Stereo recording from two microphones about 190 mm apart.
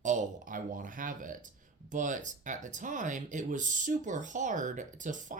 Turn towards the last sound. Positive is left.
turn(degrees=-40)  # may be behind; listen again after turning